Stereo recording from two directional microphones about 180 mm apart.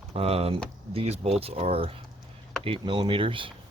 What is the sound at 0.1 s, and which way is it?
Speech, 35° right (ahead or behind).